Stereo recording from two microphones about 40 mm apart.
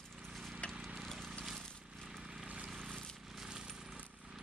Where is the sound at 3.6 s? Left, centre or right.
Centre.